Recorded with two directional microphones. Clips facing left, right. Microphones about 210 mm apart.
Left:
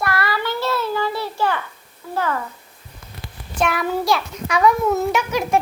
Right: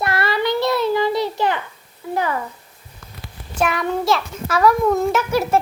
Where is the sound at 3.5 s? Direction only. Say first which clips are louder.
Even; centre (ahead or behind).